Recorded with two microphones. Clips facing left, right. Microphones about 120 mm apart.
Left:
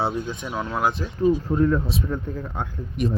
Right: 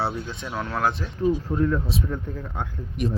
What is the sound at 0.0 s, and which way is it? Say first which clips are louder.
A man's voice: left 2 dB; 15° left (ahead or behind).